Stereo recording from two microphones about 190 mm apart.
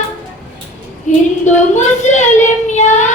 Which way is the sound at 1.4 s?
40° left (ahead or behind).